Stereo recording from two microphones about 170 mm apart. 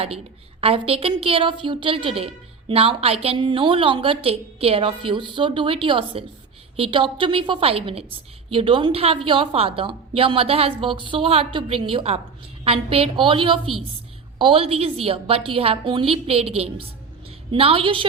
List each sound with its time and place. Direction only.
0.6 s a woman's voice: 35° right (ahead or behind)